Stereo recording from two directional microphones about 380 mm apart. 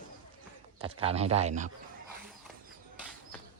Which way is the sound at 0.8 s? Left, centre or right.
Centre.